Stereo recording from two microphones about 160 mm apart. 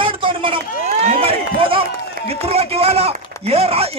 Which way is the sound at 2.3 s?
40° right (ahead or behind).